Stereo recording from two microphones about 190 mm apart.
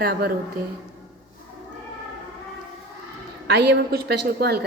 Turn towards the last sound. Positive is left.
turn(degrees=-55)  # may be behind; listen again after turning